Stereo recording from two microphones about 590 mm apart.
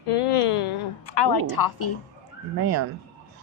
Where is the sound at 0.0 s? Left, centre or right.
Left.